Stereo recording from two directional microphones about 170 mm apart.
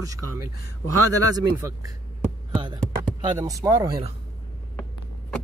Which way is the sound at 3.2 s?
25° right (ahead or behind).